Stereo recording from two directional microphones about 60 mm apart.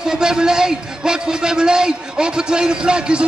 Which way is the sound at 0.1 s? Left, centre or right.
Centre.